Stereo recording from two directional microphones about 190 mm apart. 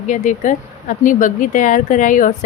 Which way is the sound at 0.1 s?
40° left (ahead or behind).